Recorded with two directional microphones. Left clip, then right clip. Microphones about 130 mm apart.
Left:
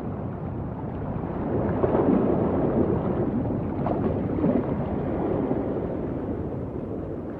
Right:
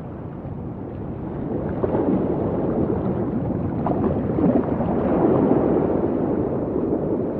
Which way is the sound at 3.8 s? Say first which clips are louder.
Right 4 dB; 50° left (ahead or behind).